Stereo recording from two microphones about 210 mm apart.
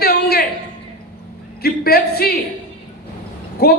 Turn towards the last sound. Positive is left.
turn(degrees=45)  # may be behind; listen again after turning